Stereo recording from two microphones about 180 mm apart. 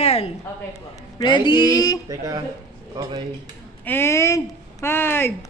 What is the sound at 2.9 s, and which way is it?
Speech, 25° right (ahead or behind).